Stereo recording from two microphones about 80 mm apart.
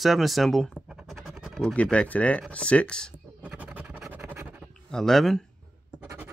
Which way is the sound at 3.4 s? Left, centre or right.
Centre.